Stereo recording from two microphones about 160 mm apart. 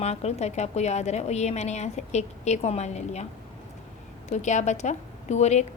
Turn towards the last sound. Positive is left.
turn(degrees=45)  # may be behind; listen again after turning